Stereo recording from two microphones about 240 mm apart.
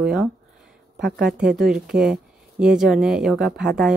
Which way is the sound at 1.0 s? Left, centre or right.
Right.